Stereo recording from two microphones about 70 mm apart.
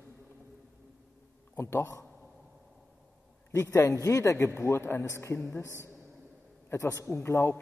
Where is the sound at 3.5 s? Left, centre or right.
Left.